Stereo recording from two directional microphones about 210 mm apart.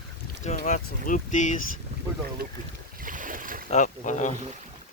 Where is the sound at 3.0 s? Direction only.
40° right (ahead or behind).